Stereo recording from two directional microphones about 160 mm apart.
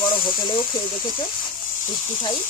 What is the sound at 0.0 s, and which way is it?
Hiss, 25° left (ahead or behind).